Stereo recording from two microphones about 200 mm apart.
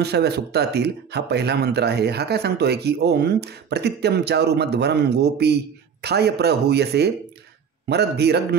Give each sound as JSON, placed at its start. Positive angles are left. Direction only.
{"t": 0.0, "sound": "speech", "side_deg": -55}